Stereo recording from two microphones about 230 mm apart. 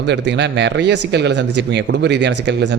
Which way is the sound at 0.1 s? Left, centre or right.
Right.